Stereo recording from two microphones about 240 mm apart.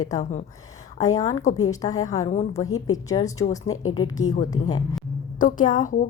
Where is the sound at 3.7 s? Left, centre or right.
Left.